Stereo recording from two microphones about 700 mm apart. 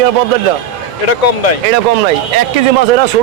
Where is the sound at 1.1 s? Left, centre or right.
Left.